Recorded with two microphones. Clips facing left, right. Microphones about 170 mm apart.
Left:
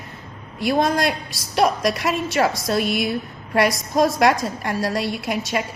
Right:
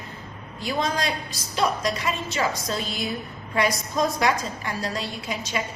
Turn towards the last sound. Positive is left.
turn(degrees=65)  # may be behind; listen again after turning